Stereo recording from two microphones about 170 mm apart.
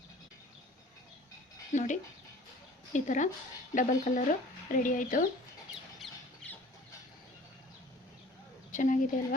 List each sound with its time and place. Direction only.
1.7 s a woman's voice: 45° left (ahead or behind)
6.0 s a sound: centre (ahead or behind)
8.7 s a woman's voice: 50° left (ahead or behind)